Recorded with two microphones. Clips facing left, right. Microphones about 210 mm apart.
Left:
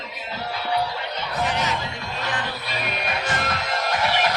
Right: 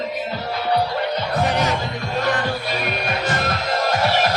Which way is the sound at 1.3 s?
50° right (ahead or behind).